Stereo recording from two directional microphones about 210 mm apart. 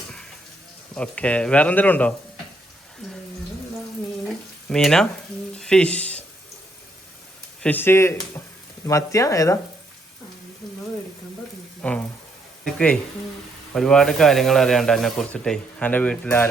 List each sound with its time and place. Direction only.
0.9 s speech: 5° left (ahead or behind)
4.7 s speech: centre (ahead or behind)
5.5 s a sound: 5° left (ahead or behind)
7.6 s speech: 10° left (ahead or behind)
11.8 s speech: 5° left (ahead or behind)